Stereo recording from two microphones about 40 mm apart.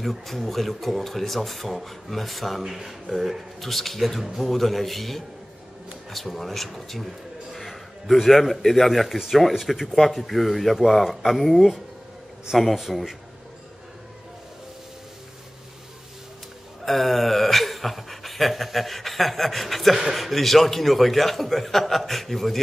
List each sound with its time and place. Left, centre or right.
0.0 s a man's voice: centre
16.8 s speech: centre